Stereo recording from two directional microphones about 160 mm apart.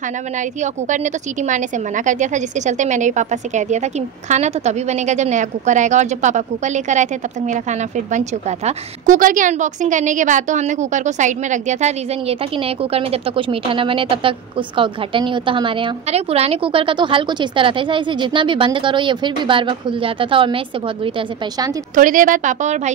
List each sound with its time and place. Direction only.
0.4 s a woman's voice: 50° right (ahead or behind); by 21.1 s 35° right (ahead or behind)
21.9 s a woman's voice: 55° right (ahead or behind)